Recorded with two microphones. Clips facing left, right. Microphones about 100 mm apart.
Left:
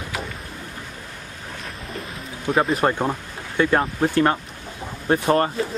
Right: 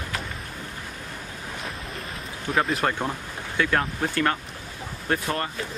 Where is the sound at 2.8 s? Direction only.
25° left (ahead or behind).